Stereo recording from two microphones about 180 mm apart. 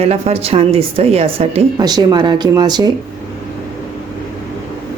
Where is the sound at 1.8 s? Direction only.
20° right (ahead or behind).